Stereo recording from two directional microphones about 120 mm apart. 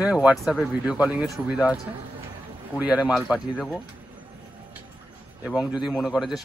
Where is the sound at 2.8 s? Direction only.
10° right (ahead or behind).